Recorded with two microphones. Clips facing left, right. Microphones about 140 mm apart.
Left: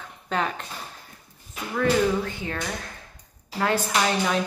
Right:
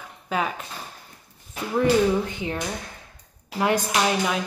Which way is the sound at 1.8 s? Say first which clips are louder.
Right 2 dB; 20° right (ahead or behind).